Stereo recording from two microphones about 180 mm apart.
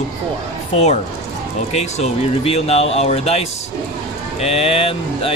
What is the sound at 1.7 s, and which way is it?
Speech, 35° left (ahead or behind).